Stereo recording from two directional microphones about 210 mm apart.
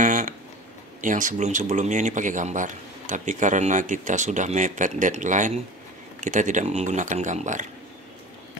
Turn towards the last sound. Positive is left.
turn(degrees=-35)  # may be behind; listen again after turning